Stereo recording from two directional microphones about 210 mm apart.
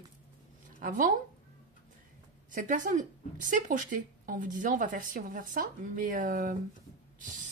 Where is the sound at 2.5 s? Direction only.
40° right (ahead or behind).